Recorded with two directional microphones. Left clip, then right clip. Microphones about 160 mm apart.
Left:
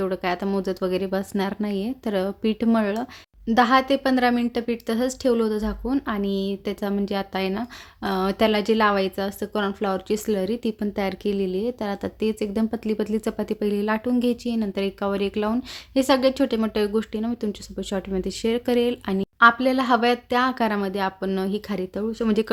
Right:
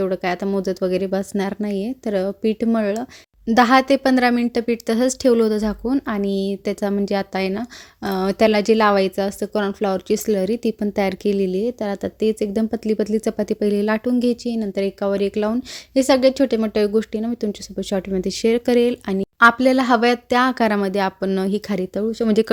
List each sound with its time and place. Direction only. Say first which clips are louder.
0.0 s speech: right 3 dB; 25° right (ahead or behind)
3.4 s speech: right 4 dB; 45° right (ahead or behind); by 19.3 s 30° right (ahead or behind)
19.4 s speech: right 3 dB; 45° right (ahead or behind)